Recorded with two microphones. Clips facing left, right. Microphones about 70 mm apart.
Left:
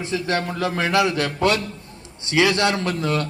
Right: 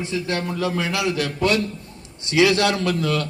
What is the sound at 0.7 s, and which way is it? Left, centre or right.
Speech, left.